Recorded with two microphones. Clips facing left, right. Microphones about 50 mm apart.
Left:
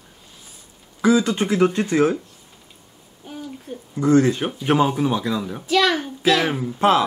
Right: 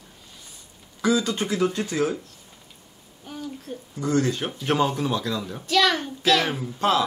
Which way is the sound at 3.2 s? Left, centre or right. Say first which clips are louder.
Left 1 dB; centre.